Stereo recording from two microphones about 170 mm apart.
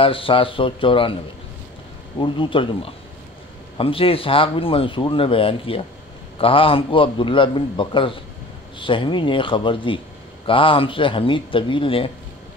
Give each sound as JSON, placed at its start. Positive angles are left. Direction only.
{"t": 0.0, "sound": "speech", "side_deg": 30}
{"t": 2.1, "sound": "speech", "side_deg": 30}